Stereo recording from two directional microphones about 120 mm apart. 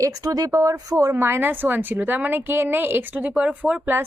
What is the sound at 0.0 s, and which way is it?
Speech, 30° right (ahead or behind).